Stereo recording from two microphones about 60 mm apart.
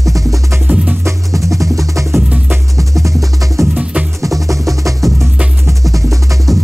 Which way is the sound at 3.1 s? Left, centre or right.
Right.